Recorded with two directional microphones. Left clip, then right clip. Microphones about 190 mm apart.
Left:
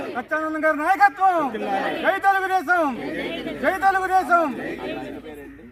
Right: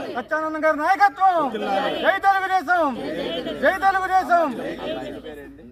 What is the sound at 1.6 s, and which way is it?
Speech, 5° left (ahead or behind).